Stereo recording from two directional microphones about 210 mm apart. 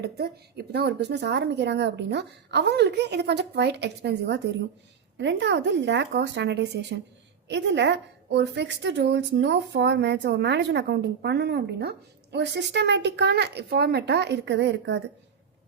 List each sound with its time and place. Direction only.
0.0 s a woman's voice: 50° right (ahead or behind)